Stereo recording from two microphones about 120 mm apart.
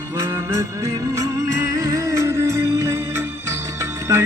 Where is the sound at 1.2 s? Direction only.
25° right (ahead or behind).